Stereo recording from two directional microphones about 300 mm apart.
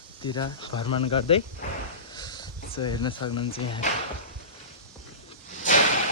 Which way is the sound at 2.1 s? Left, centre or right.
Centre.